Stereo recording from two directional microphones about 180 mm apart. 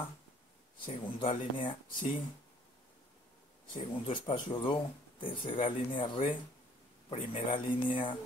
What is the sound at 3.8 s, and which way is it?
A man's voice, 30° left (ahead or behind).